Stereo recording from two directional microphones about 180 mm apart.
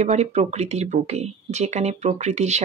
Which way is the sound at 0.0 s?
40° right (ahead or behind).